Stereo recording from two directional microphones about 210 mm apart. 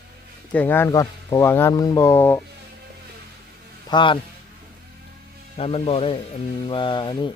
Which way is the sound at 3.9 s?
20° left (ahead or behind).